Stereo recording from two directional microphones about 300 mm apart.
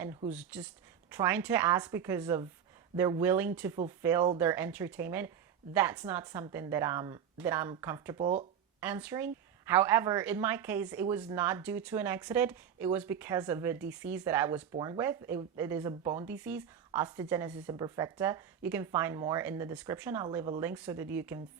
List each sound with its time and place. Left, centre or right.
0.0 s a woman's voice: centre
8.2 s speech: right
8.8 s a woman's voice: centre